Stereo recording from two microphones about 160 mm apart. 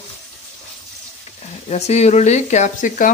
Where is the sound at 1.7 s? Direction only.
45° left (ahead or behind).